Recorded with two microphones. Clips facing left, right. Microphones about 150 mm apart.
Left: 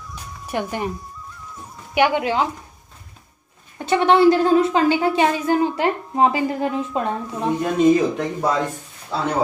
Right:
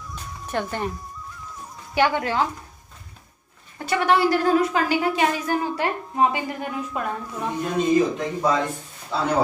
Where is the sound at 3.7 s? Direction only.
25° left (ahead or behind).